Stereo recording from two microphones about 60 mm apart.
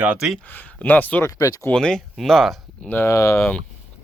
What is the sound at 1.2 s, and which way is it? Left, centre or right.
Speech, left.